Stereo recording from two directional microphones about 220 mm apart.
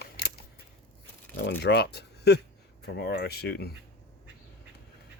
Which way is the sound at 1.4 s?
50° left (ahead or behind).